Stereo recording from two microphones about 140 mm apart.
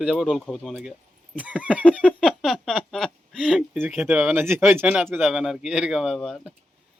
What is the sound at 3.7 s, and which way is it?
Speech, 10° right (ahead or behind).